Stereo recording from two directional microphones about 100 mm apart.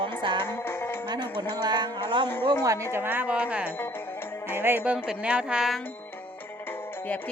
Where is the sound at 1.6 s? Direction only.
45° right (ahead or behind).